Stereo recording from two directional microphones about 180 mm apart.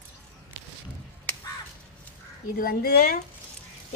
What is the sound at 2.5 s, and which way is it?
Speech, 55° left (ahead or behind).